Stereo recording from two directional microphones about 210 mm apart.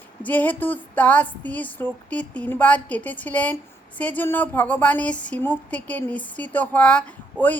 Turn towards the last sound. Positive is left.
turn(degrees=5)  # may be behind; listen again after turning